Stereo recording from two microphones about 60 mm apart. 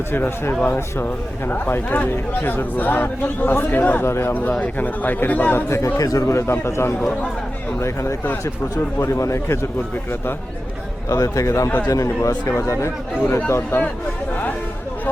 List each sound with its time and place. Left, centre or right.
0.1 s speech: left
0.6 s speech: left
4.0 s speech: left
4.6 s speech: left
5.6 s speech: left
6.0 s speech: left
11.1 s speech: left
13.7 s speech: left